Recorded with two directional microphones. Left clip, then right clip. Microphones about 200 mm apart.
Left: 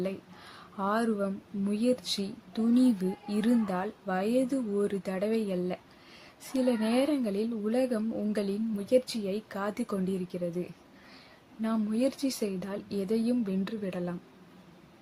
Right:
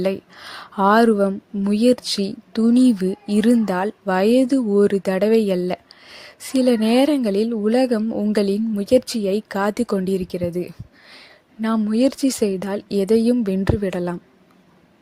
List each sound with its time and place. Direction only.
0.0 s a woman's voice: 45° right (ahead or behind)